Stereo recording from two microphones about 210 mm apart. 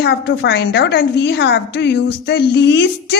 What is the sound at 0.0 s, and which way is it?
A woman's voice, 55° left (ahead or behind).